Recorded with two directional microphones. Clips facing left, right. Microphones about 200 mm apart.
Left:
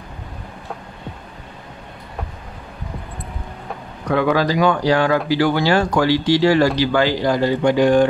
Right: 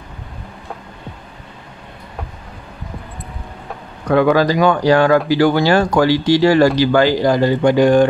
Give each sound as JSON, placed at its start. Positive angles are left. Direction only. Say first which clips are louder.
{"t": 4.1, "sound": "speech", "louder": "right 4 dB", "side_deg": -50}